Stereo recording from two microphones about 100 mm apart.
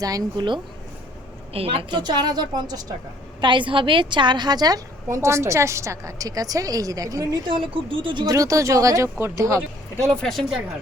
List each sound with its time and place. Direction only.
0.0 s a woman's voice: 35° right (ahead or behind)
1.5 s a woman's voice: 70° right (ahead or behind)
2.0 s a woman's voice: 45° right (ahead or behind)
5.0 s a woman's voice: 30° right (ahead or behind)
7.4 s speech: 60° right (ahead or behind)
8.3 s a woman's voice: 35° right (ahead or behind)
10.1 s speech: 5° left (ahead or behind)